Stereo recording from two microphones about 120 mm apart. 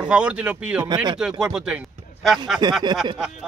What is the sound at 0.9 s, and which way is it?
Speech, 35° right (ahead or behind).